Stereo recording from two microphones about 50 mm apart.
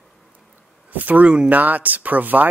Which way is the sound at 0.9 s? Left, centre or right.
Right.